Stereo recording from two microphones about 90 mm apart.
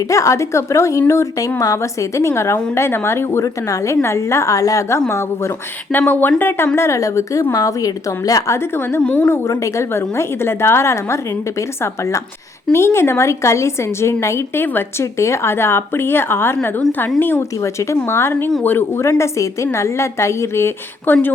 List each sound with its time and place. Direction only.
0.1 s a woman's voice: 35° left (ahead or behind)
5.9 s a woman's voice: 20° left (ahead or behind)
6.7 s a woman's voice: 35° left (ahead or behind)
8.5 s a woman's voice: 25° left (ahead or behind)
9.0 s a woman's voice: 15° left (ahead or behind)
9.3 s a woman's voice: 30° left (ahead or behind)